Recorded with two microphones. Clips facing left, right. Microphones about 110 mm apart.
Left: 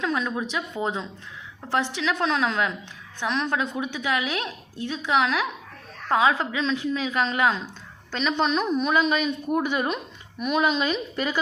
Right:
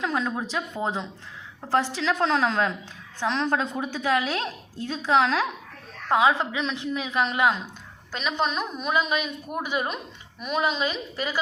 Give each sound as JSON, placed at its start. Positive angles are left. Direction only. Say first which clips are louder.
{"t": 0.0, "sound": "speech", "louder": "even", "side_deg": -25}
{"t": 1.6, "sound": "a woman's voice", "louder": "right 1 dB", "side_deg": -35}
{"t": 6.1, "sound": "a woman's voice", "louder": "even", "side_deg": -20}
{"t": 8.1, "sound": "a woman's voice", "louder": "left 3 dB", "side_deg": -5}